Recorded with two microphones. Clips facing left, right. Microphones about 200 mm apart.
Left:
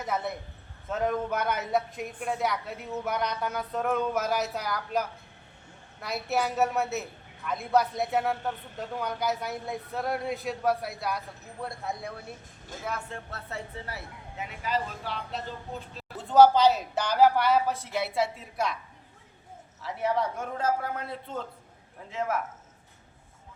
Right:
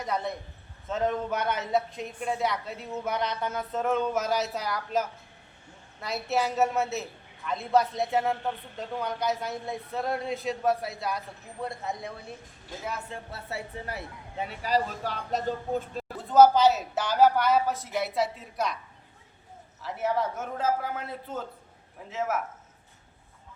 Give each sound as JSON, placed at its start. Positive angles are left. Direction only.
{"t": 0.9, "sound": "a woman's voice", "side_deg": 0}
{"t": 14.3, "sound": "speech", "side_deg": -35}
{"t": 16.3, "sound": "a woman's voice", "side_deg": 0}
{"t": 19.8, "sound": "a woman's voice", "side_deg": 0}